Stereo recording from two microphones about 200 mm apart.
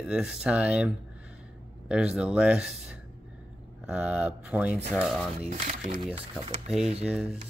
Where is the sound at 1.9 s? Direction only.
5° right (ahead or behind).